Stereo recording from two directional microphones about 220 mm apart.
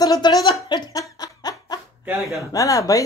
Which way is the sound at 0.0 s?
20° left (ahead or behind).